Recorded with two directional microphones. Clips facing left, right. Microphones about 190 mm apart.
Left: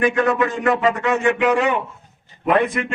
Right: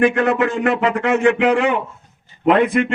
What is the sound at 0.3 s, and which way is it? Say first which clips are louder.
A man's voice: right 1 dB; 55° right (ahead or behind).